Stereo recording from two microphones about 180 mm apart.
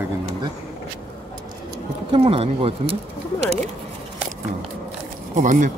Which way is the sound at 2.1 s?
30° right (ahead or behind).